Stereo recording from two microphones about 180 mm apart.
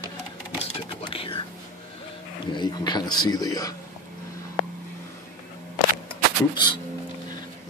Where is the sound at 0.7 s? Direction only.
30° left (ahead or behind).